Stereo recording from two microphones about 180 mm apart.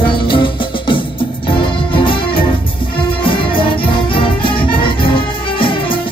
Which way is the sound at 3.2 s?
30° left (ahead or behind).